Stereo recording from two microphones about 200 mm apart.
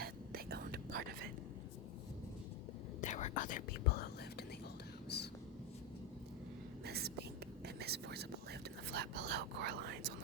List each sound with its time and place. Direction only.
0.0 s whispering: 50° right (ahead or behind)
3.0 s whispering: 35° left (ahead or behind); by 5.3 s 55° left (ahead or behind)
6.8 s whispering: 55° right (ahead or behind)